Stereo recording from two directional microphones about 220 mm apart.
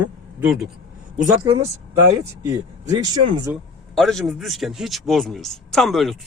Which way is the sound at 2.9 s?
20° right (ahead or behind).